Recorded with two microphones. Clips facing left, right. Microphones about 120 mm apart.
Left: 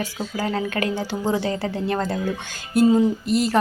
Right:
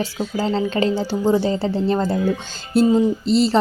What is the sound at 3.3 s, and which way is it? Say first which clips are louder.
Speech: right 4 dB; 50° left (ahead or behind).